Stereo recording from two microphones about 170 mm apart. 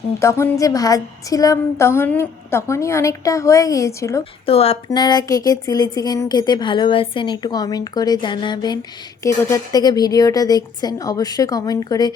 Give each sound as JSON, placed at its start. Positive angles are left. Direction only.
{"t": 0.2, "sound": "a woman's voice", "side_deg": 15}
{"t": 4.4, "sound": "speech", "side_deg": 35}
{"t": 4.9, "sound": "a woman's voice", "side_deg": 25}